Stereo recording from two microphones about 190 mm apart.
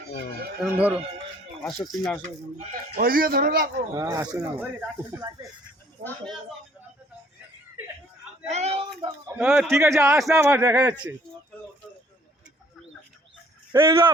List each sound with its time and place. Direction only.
0.6 s a man's voice: 5° right (ahead or behind)
3.0 s a man's voice: 50° right (ahead or behind)
3.9 s a man's voice: 20° right (ahead or behind)
6.0 s speech: centre (ahead or behind)
8.4 s speech: 35° right (ahead or behind)
9.4 s speech: 5° right (ahead or behind)
9.7 s a man's voice: 15° right (ahead or behind)
13.8 s speech: 25° right (ahead or behind)